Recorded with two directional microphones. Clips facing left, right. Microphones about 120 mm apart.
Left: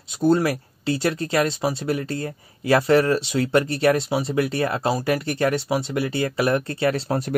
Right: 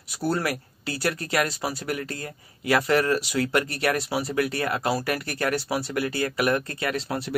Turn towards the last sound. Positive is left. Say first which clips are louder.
# left 6 dB
turn(degrees=40)  # may be behind; listen again after turning